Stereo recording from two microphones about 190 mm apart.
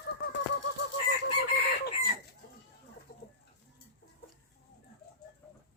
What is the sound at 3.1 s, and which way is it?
Chicken, 55° left (ahead or behind).